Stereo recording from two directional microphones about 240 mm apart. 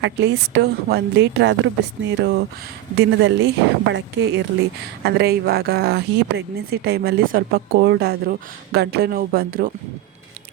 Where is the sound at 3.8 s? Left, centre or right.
Right.